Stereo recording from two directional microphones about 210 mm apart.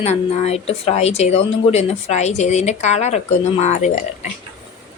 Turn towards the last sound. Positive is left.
turn(degrees=35)  # may be behind; listen again after turning